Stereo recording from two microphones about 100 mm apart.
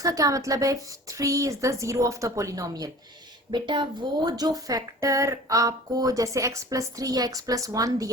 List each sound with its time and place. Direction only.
0.0 s speech: 35° right (ahead or behind)
3.5 s speech: 50° right (ahead or behind)